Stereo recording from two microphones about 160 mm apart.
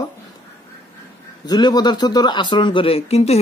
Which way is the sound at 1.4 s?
25° left (ahead or behind).